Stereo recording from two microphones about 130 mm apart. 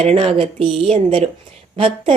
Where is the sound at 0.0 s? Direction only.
55° right (ahead or behind).